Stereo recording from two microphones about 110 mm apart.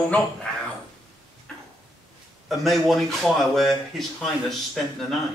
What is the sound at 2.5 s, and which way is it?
Speech, centre (ahead or behind).